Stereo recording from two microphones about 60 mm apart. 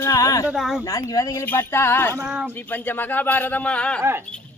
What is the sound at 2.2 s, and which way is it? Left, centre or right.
Speech, centre.